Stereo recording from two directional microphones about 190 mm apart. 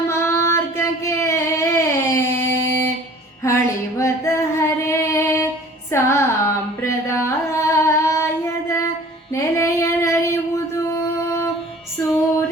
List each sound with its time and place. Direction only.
0.1 s singing: 15° left (ahead or behind)
3.4 s female singing: 15° left (ahead or behind)
5.9 s carnatic music: 15° left (ahead or behind)
9.3 s a sound: 15° left (ahead or behind)